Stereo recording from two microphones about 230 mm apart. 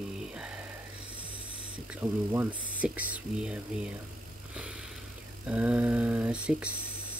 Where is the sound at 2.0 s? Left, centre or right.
Centre.